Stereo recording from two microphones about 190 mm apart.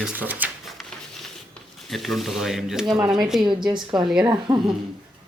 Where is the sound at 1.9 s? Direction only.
Centre (ahead or behind).